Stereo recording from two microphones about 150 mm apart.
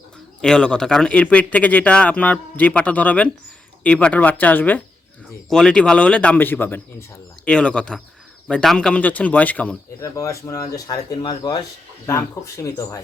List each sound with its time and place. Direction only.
0.4 s speech: 5° left (ahead or behind); by 13.0 s 20° left (ahead or behind)